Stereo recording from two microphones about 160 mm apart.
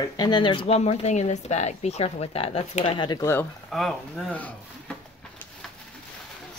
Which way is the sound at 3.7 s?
5° left (ahead or behind).